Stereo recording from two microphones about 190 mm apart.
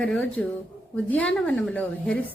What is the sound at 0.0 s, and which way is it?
Speech, 5° left (ahead or behind).